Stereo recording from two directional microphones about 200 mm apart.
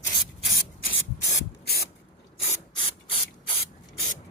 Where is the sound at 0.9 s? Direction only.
50° left (ahead or behind).